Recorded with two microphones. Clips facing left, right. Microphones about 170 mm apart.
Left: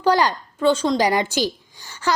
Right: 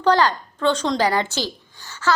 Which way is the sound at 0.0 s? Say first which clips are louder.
Right 1 dB; 10° left (ahead or behind).